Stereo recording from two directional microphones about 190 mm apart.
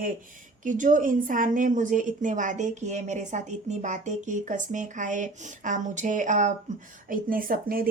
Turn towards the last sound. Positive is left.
turn(degrees=-50)  # may be behind; listen again after turning